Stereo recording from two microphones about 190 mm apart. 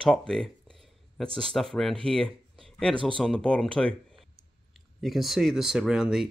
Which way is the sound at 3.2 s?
5° left (ahead or behind).